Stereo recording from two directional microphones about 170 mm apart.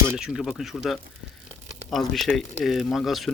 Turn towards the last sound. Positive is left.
turn(degrees=0)  # may be behind; listen again after turning